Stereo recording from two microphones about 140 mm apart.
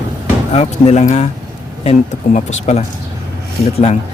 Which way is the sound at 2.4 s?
50° left (ahead or behind).